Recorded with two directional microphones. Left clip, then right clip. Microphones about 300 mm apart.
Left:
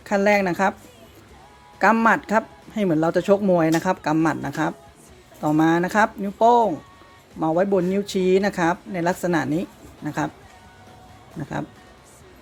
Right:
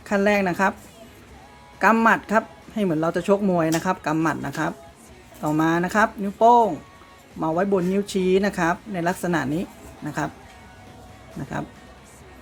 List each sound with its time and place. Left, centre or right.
0.0 s a woman's voice: centre
1.8 s a woman's voice: centre